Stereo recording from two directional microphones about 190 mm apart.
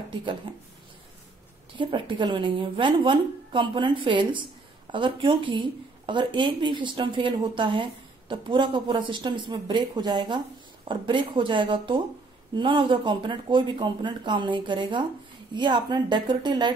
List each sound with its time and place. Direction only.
1.8 s a woman's voice: 25° right (ahead or behind)